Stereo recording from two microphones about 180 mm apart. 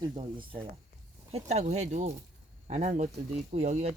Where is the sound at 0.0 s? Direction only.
25° right (ahead or behind).